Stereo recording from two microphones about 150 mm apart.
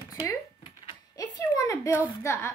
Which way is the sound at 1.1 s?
20° left (ahead or behind).